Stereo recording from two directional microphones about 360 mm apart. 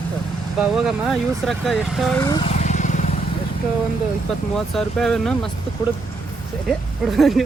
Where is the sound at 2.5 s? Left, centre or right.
Centre.